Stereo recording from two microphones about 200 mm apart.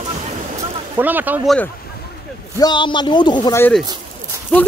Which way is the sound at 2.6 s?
20° left (ahead or behind).